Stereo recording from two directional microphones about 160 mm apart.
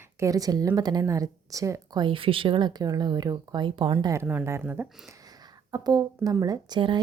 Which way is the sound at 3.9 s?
20° right (ahead or behind).